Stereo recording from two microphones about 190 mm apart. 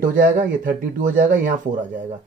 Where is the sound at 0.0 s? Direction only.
45° right (ahead or behind).